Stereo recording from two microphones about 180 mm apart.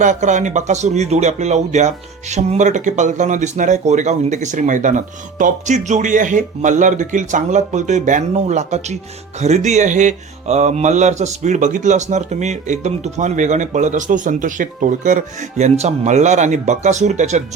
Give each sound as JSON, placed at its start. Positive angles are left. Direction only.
{"t": 0.0, "sound": "speech", "side_deg": -40}